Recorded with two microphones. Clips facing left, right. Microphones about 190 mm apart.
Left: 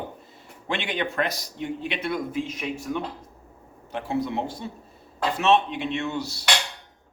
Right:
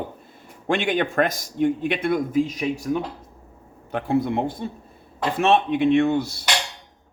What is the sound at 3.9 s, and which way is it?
A man's voice, 55° right (ahead or behind).